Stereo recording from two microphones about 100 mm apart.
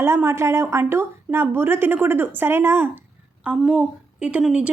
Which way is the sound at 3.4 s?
10° right (ahead or behind).